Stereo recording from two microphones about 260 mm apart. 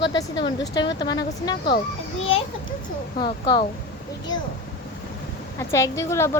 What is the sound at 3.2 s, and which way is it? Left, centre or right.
Speech, centre.